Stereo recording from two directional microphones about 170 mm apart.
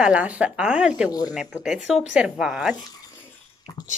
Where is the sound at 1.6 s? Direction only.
5° right (ahead or behind).